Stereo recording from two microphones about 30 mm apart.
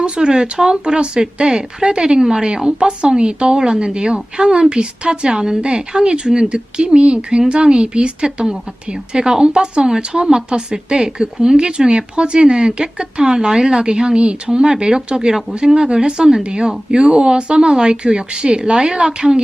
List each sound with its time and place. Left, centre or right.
0.0 s speech: right
0.9 s a woman's voice: right
1.2 s speech: right
2.7 s a woman's voice: right